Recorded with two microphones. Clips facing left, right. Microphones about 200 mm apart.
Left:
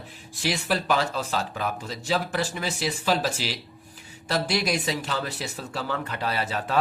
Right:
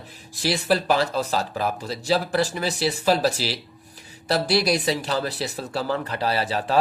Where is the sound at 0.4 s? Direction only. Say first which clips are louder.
Right 4 dB; 35° right (ahead or behind).